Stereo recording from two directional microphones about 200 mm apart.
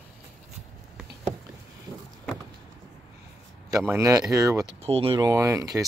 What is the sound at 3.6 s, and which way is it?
Speech, 15° right (ahead or behind).